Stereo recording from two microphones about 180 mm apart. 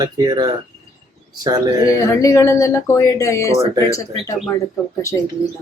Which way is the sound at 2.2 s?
15° left (ahead or behind).